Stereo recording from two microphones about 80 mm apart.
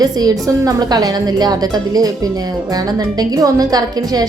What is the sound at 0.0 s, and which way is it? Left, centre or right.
A woman's voice, right.